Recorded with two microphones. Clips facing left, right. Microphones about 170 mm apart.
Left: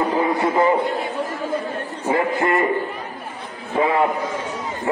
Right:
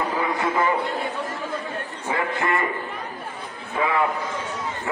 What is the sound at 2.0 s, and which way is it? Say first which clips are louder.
Speech: left 6 dB; 25° left (ahead or behind).